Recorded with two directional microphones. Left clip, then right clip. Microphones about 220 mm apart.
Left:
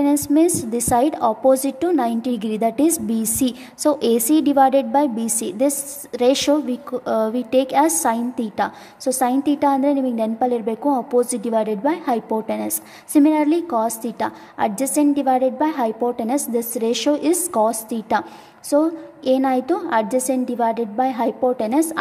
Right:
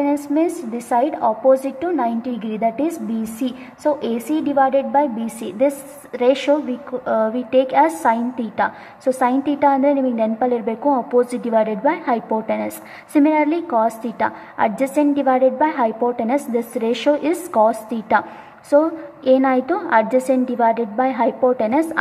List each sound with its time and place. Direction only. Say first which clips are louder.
0.0 s a woman's voice: left 2 dB; 50° left (ahead or behind)